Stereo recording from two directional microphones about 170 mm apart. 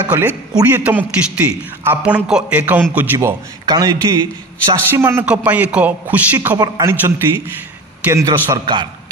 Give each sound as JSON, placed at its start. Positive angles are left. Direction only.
{"t": 0.0, "sound": "a man's voice", "side_deg": -10}
{"t": 3.6, "sound": "a man's voice", "side_deg": -25}
{"t": 4.9, "sound": "a man's voice", "side_deg": -15}